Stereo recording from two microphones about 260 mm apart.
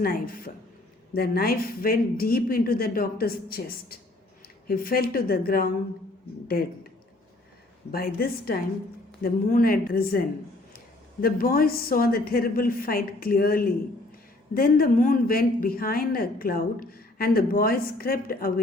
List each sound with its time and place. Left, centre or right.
0.0 s speech: left
7.9 s speech: left